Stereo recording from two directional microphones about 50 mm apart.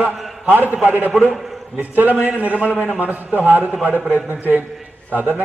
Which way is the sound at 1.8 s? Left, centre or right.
Right.